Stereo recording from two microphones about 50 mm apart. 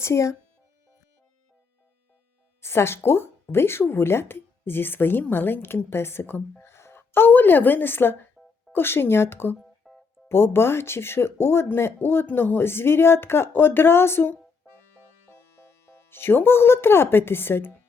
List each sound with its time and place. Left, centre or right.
0.0 s speech: left
2.6 s a woman's voice: left
8.4 s music: centre
8.7 s a woman's voice: left
9.8 s music: centre
10.2 s a woman's voice: left
16.0 s a woman's voice: left